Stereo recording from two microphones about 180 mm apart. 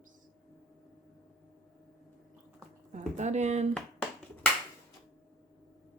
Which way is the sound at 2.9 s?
40° right (ahead or behind).